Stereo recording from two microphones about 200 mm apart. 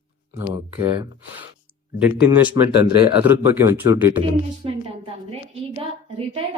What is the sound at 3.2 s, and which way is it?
Speech, 10° right (ahead or behind).